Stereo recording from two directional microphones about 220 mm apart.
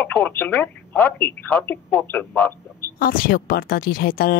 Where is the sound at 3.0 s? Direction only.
40° left (ahead or behind).